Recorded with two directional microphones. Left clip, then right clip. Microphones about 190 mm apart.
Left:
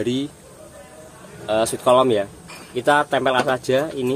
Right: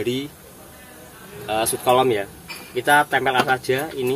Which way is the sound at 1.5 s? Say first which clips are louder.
Left 2 dB; 45° left (ahead or behind).